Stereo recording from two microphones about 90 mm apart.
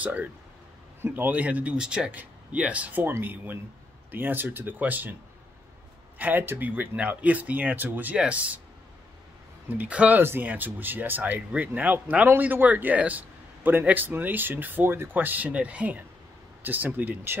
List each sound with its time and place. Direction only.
0.0 s speech: 15° right (ahead or behind)
6.1 s speech: 20° right (ahead or behind)
9.7 s speech: 15° right (ahead or behind)